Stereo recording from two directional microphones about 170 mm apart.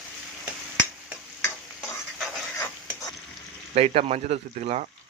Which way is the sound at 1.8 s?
Centre (ahead or behind).